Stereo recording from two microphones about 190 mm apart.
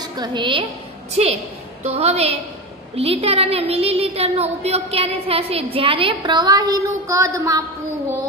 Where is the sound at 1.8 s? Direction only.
35° right (ahead or behind); by 7.6 s 15° right (ahead or behind).